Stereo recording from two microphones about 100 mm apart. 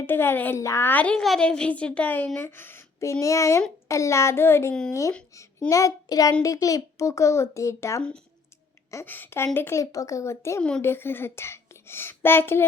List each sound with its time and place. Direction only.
0.0 s a child's voice: 20° left (ahead or behind)
9.0 s a child's voice: 20° left (ahead or behind)